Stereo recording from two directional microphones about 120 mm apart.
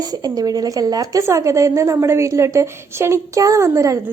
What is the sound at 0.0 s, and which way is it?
A woman's voice, 35° right (ahead or behind).